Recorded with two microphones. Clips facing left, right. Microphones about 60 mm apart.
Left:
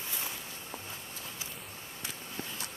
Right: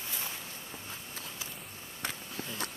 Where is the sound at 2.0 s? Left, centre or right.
Right.